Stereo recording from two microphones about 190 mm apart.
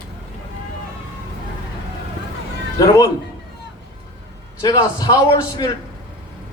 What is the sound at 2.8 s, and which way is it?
Speech, 20° left (ahead or behind).